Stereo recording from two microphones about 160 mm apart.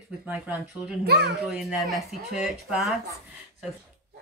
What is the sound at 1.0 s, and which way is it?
Speech, 90° right.